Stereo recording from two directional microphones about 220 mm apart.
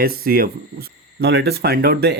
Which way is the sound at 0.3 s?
40° right (ahead or behind).